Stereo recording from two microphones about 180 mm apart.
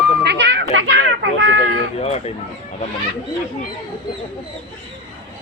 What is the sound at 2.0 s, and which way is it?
Speech, 35° left (ahead or behind).